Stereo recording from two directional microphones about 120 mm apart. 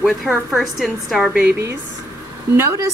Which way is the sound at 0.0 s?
Centre (ahead or behind).